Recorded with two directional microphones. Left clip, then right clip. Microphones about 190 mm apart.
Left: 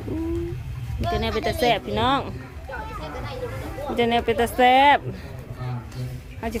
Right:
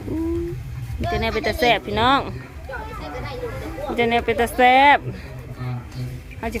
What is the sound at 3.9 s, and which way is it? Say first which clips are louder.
Speech: right 2 dB; 10° left (ahead or behind).